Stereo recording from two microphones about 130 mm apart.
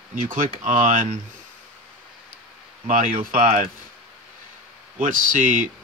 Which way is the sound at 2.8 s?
90° right.